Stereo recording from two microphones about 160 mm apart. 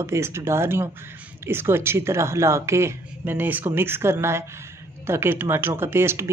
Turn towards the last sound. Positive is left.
turn(degrees=-15)  # may be behind; listen again after turning